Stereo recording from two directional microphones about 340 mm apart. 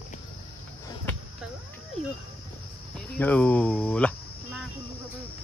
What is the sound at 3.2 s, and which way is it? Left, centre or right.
Speech, centre.